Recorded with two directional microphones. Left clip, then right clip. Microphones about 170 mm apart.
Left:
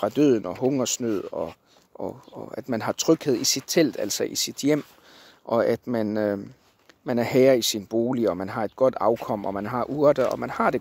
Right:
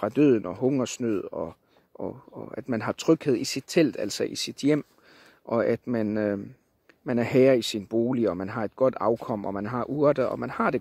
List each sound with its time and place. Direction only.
0.0 s speech: 40° right (ahead or behind)